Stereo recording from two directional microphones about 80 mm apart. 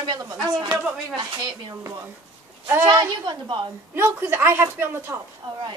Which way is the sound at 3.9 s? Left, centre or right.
Right.